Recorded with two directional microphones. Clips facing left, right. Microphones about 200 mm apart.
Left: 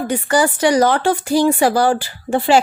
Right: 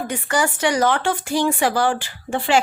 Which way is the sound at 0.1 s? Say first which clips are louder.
Left 6 dB; 35° left (ahead or behind).